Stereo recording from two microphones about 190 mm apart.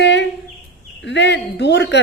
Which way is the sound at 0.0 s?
70° left (ahead or behind).